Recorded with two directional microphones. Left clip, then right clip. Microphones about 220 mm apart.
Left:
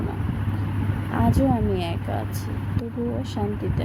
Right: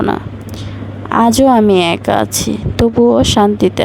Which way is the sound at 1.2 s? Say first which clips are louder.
Right 15 dB; 50° right (ahead or behind).